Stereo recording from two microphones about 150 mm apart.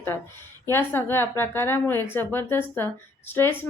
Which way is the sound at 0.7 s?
15° left (ahead or behind).